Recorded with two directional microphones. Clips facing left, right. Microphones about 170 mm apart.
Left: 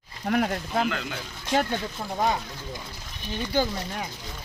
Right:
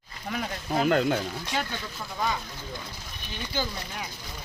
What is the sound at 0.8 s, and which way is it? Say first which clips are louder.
Speech: right 6 dB; 45° right (ahead or behind).